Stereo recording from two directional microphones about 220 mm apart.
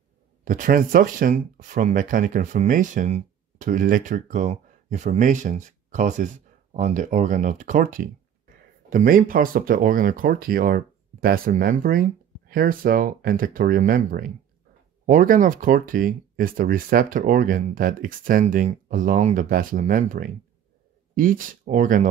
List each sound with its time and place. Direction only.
0.5 s speech: 40° right (ahead or behind)